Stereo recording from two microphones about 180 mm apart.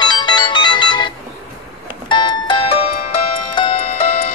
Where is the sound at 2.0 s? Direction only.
25° left (ahead or behind).